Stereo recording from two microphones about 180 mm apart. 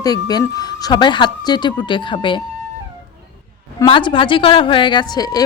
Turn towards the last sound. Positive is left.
turn(degrees=20)  # may be behind; listen again after turning